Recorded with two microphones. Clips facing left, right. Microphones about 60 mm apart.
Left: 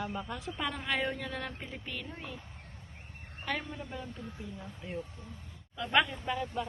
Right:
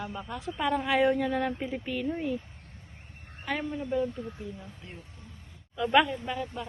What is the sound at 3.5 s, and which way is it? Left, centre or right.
Speech, centre.